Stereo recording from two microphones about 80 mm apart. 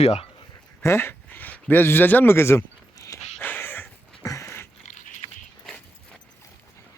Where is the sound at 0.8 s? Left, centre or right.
Left.